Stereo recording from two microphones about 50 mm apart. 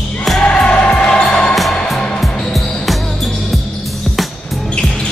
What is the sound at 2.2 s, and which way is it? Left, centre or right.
Music, centre.